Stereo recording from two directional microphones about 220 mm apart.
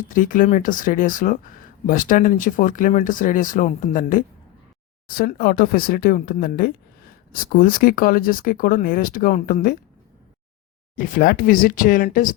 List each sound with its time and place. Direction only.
0.0 s speech: 35° left (ahead or behind)
10.9 s speech: 40° left (ahead or behind)